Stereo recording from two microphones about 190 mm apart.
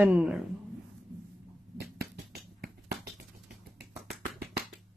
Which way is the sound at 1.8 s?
55° right (ahead or behind).